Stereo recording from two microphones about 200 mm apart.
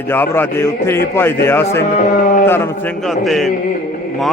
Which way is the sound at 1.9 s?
40° left (ahead or behind).